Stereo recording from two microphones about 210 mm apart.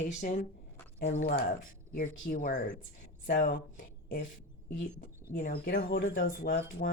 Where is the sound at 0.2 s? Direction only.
40° left (ahead or behind).